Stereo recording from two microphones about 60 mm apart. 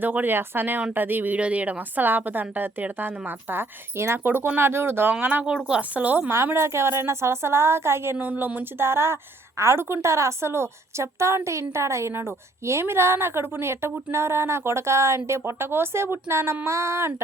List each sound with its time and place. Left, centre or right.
0.0 s a woman's voice: right
5.6 s a woman's voice: centre
6.0 s speech: right
6.3 s a woman's voice: right
8.2 s speech: right
8.8 s a woman's voice: right